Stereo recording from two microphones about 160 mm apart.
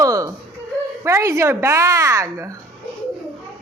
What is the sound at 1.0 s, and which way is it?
A woman's voice, 20° right (ahead or behind).